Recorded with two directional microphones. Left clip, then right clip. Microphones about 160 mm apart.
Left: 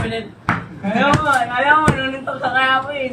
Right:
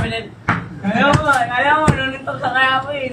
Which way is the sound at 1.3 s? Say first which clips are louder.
Even; 5° left (ahead or behind).